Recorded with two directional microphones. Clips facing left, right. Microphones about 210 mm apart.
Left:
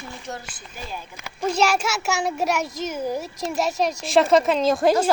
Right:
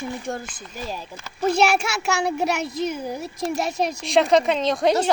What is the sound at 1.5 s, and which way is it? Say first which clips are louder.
A child's voice: right 1 dB; 60° right (ahead or behind).